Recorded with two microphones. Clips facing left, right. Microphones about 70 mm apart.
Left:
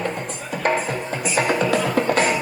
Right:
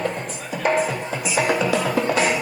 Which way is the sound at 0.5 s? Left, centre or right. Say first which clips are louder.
Right 1 dB; left.